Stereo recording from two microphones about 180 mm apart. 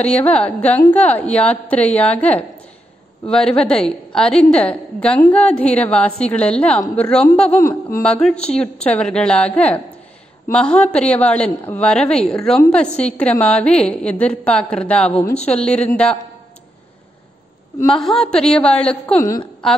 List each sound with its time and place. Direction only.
0.0 s a woman's voice: 10° left (ahead or behind)
3.3 s a woman's voice: 5° left (ahead or behind)
18.0 s a woman's voice: 5° left (ahead or behind)
19.1 s a woman's voice: 20° left (ahead or behind)